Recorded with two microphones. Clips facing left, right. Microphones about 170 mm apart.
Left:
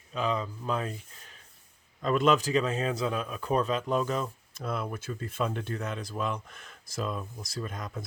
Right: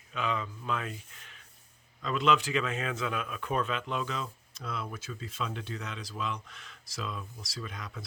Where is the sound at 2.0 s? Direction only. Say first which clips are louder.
Left 3 dB; 45° left (ahead or behind).